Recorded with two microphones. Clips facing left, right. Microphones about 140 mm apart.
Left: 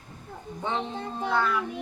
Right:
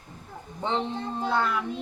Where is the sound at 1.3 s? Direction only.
20° right (ahead or behind).